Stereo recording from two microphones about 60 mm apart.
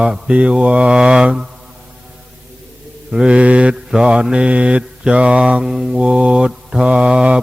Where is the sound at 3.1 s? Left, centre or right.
Centre.